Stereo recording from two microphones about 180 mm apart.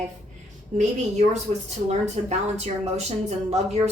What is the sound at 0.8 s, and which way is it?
Speech, 40° right (ahead or behind).